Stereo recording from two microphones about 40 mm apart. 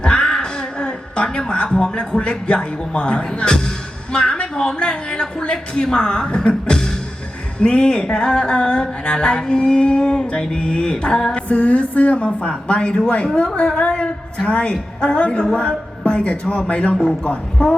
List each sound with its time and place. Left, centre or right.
0.0 s a woman's voice: left
4.1 s a sound: left
4.8 s a woman's voice: left
7.6 s music: left
11.4 s a woman's voice: left
15.5 s music: left